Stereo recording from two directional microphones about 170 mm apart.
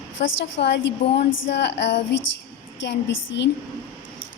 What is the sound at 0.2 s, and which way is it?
A woman's voice, 90° left.